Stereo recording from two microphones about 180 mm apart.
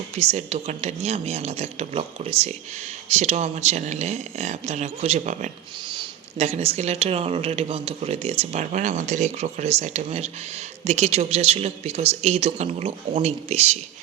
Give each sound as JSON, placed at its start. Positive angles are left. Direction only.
{"t": 0.2, "sound": "speech", "side_deg": -35}